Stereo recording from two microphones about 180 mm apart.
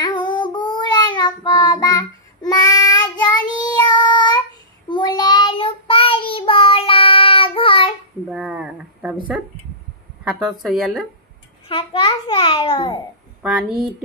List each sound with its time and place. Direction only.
0.0 s child singing: 25° left (ahead or behind)
8.3 s speech: 5° right (ahead or behind)
10.2 s speech: 5° right (ahead or behind)
11.7 s a child's voice: 25° left (ahead or behind)